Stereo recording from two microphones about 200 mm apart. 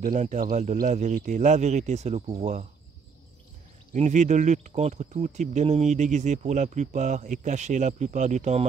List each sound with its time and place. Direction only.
0.0 s speech: 35° right (ahead or behind)
3.9 s speech: 35° right (ahead or behind)